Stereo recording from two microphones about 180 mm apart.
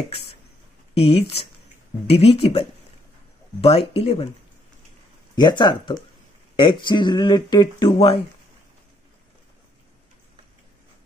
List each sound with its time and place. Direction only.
0.9 s speech: 35° left (ahead or behind)
3.6 s speech: 35° left (ahead or behind)
5.3 s speech: 25° left (ahead or behind)